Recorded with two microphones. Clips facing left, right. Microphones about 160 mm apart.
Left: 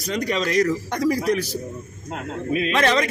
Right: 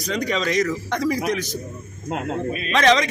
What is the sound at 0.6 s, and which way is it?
Speech, 40° left (ahead or behind).